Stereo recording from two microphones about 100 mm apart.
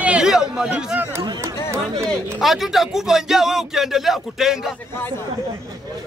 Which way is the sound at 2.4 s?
Centre (ahead or behind).